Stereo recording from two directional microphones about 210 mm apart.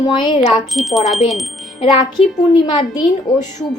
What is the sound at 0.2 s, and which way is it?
Speech, 20° left (ahead or behind).